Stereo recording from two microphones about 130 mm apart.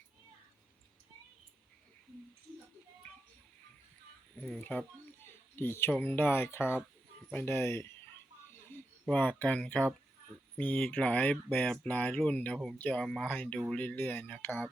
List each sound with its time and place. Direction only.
4.4 s speech: 10° left (ahead or behind)
9.0 s speech: 15° left (ahead or behind)